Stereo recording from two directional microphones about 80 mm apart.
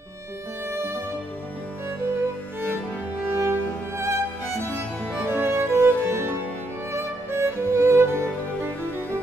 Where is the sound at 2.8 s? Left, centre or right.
Right.